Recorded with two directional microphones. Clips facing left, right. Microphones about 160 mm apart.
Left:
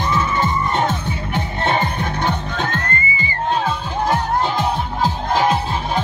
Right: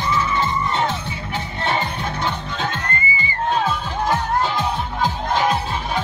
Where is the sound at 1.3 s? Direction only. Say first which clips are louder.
Left 3 dB; 55° left (ahead or behind).